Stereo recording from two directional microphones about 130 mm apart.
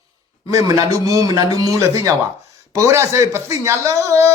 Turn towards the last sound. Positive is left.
turn(degrees=-20)  # may be behind; listen again after turning